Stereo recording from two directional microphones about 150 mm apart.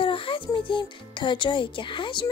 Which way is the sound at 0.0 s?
35° left (ahead or behind).